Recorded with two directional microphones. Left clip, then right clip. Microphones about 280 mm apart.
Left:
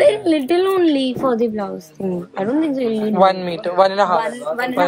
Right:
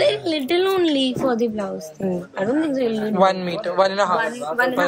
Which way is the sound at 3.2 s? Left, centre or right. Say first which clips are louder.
Left 3 dB; centre.